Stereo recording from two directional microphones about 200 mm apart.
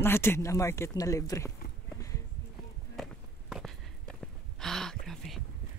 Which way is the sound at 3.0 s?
Centre (ahead or behind).